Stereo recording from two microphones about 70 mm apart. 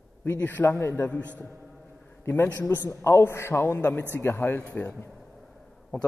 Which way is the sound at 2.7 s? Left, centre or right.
Left.